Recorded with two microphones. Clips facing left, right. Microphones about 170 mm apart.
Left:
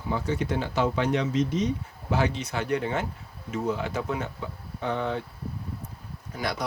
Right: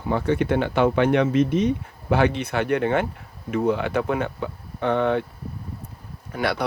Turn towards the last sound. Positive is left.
turn(degrees=-65)  # may be behind; listen again after turning